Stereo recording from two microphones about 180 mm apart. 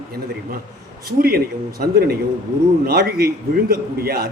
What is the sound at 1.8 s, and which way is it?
A man's voice, 50° right (ahead or behind).